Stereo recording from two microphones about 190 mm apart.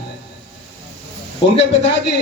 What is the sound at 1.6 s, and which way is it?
Speech, 70° left (ahead or behind).